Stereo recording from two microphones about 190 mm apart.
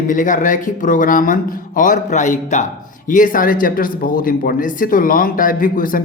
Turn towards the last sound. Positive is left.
turn(degrees=45)  # may be behind; listen again after turning